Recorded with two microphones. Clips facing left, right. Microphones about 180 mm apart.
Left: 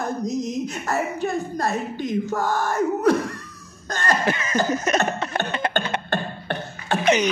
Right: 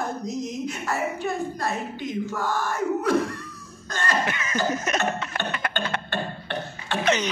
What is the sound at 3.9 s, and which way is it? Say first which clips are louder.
Cough: left 4 dB; 45° left (ahead or behind).